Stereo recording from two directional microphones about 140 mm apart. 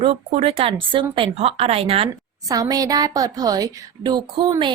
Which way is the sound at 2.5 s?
25° right (ahead or behind).